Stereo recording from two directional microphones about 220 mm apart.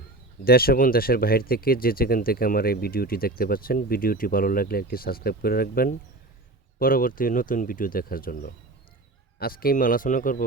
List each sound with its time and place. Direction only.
0.4 s speech: 45° left (ahead or behind)